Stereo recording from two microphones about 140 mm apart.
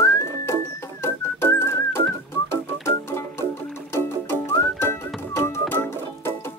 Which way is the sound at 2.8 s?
20° left (ahead or behind).